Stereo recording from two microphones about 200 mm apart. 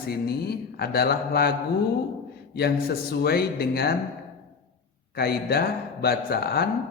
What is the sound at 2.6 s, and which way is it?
A man's voice, 55° left (ahead or behind).